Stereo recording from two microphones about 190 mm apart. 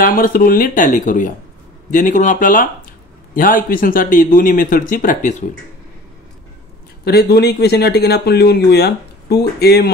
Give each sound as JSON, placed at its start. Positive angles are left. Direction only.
{"t": 0.0, "sound": "speech", "side_deg": 50}
{"t": 7.1, "sound": "speech", "side_deg": 55}